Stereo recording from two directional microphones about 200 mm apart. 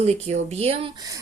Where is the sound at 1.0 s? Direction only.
15° right (ahead or behind).